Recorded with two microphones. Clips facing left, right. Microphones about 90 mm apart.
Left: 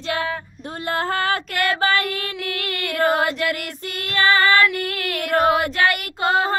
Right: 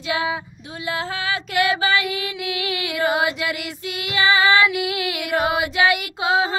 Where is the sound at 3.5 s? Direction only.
5° right (ahead or behind).